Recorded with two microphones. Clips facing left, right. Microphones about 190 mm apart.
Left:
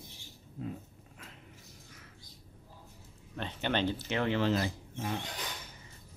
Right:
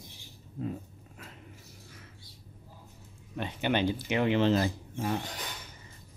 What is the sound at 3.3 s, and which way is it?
Speech, 10° right (ahead or behind).